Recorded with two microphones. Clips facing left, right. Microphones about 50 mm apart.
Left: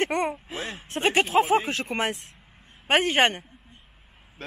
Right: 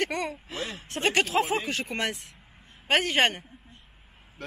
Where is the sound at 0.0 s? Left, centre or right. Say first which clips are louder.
Left 4 dB; left.